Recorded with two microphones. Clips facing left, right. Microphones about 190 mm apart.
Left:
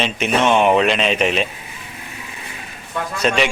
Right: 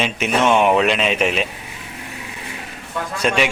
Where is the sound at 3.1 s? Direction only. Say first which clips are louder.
Left 1 dB; 10° right (ahead or behind).